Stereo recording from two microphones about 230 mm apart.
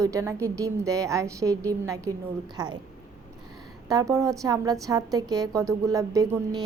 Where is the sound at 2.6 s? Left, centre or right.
Centre.